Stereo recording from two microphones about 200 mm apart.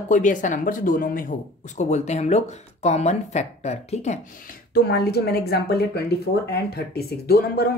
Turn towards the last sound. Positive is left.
turn(degrees=50)  # may be behind; listen again after turning